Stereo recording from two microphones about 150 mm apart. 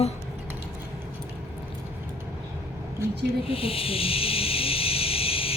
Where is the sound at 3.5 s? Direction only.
40° left (ahead or behind).